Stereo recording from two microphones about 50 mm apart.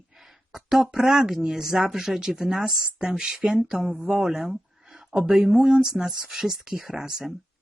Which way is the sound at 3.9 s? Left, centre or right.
Right.